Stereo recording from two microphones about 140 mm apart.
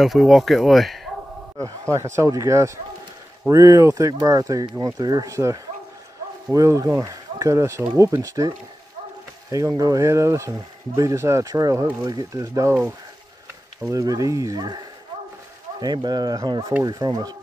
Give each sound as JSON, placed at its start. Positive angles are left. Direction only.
{"t": 0.0, "sound": "speech", "side_deg": 0}
{"t": 1.6, "sound": "a man's voice", "side_deg": -20}
{"t": 9.5, "sound": "speech", "side_deg": -25}